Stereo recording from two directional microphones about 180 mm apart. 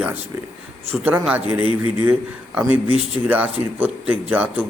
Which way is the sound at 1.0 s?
10° right (ahead or behind).